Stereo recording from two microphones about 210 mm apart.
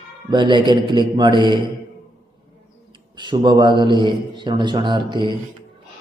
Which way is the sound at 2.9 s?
20° right (ahead or behind).